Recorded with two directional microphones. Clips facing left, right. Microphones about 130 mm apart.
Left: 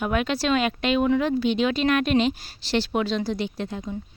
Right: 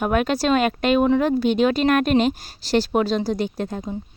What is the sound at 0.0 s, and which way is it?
Speech, 45° right (ahead or behind).